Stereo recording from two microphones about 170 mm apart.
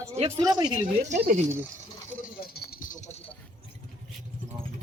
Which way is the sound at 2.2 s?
65° left (ahead or behind).